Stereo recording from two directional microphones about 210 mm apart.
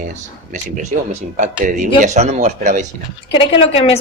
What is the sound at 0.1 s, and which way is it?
Speech, 35° right (ahead or behind).